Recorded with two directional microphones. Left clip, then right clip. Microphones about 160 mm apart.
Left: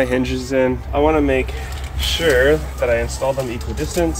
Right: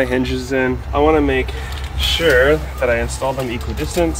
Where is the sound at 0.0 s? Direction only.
25° left (ahead or behind).